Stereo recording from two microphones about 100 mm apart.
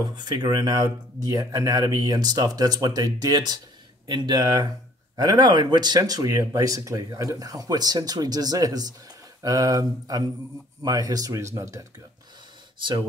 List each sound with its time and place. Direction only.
0.0 s speech: 45° right (ahead or behind)